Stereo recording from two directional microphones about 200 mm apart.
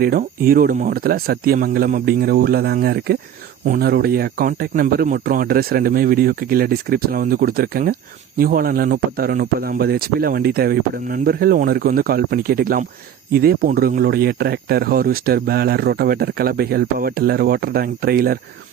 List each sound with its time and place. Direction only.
0.0 s speech: 45° right (ahead or behind)